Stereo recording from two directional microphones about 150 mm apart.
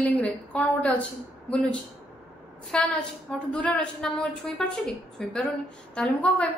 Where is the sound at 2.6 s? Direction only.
5° left (ahead or behind).